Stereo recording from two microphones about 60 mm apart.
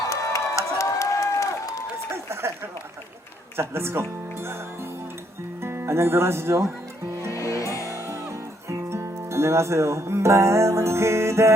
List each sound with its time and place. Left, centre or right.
0.1 s a sound: left
2.0 s run: right
3.6 s speech: right
5.6 s speech: right
7.3 s music: left
8.7 s music: right